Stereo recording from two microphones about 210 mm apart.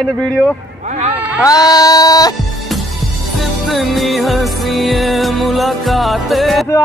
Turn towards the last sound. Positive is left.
turn(degrees=0)  # may be behind; listen again after turning